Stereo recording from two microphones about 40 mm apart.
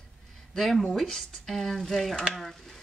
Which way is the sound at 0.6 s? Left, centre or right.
Centre.